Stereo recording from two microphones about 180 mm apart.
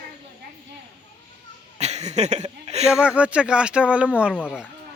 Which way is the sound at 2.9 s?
5° right (ahead or behind).